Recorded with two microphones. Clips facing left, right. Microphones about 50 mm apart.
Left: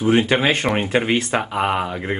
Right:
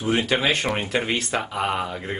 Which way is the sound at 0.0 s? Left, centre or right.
Centre.